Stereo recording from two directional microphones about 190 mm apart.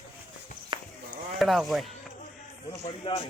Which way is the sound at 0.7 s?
25° right (ahead or behind).